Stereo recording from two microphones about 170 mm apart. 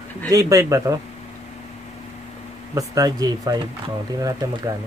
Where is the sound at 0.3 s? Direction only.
20° right (ahead or behind).